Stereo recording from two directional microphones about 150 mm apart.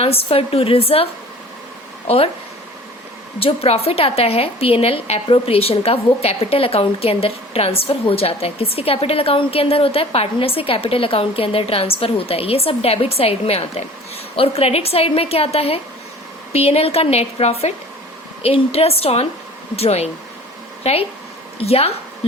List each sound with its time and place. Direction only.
0.0 s a woman's voice: 40° left (ahead or behind)
2.0 s a woman's voice: 40° left (ahead or behind)
3.4 s a woman's voice: 40° left (ahead or behind)